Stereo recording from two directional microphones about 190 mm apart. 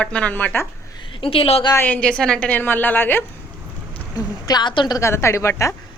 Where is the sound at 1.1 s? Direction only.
30° left (ahead or behind).